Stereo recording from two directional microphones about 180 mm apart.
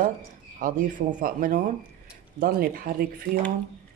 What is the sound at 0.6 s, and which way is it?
Speech, 45° right (ahead or behind).